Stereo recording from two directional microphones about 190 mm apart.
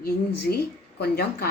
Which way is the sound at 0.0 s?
55° left (ahead or behind).